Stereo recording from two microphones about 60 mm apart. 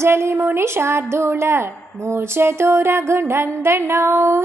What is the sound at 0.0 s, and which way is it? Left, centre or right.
A woman's voice, right.